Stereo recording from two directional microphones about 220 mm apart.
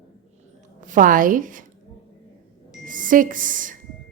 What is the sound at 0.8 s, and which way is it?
Speech, 35° right (ahead or behind).